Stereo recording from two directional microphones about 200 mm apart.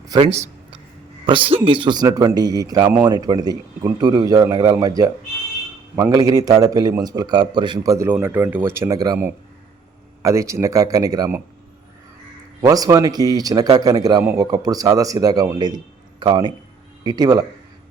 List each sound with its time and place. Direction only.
0.1 s a sound: 30° right (ahead or behind)
1.3 s a man's voice: 25° right (ahead or behind)
12.6 s a man's voice: 15° right (ahead or behind)